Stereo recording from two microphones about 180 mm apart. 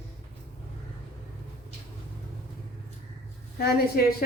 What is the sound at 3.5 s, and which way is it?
Speech, 60° left (ahead or behind).